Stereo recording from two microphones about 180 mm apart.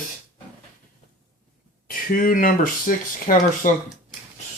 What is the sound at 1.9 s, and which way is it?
Speech, 50° left (ahead or behind).